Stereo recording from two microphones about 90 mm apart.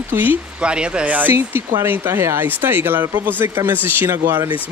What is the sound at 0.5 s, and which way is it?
Speech, 10° right (ahead or behind).